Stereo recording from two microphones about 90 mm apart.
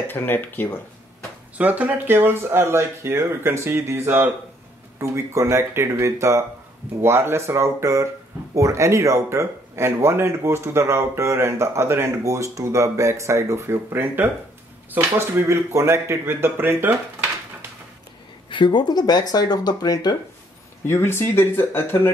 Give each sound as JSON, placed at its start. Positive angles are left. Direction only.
{"t": 0.1, "sound": "speech", "side_deg": 20}
{"t": 1.6, "sound": "speech", "side_deg": -20}
{"t": 18.5, "sound": "speech", "side_deg": 65}
{"t": 20.8, "sound": "speech", "side_deg": 25}